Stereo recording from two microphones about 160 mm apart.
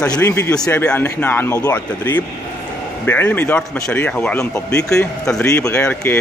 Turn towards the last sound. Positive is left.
turn(degrees=10)  # may be behind; listen again after turning